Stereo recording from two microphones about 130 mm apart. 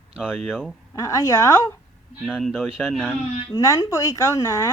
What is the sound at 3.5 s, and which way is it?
Speech, 25° left (ahead or behind).